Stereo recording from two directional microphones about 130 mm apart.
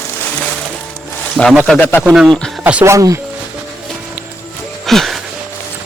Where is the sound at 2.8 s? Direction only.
25° right (ahead or behind).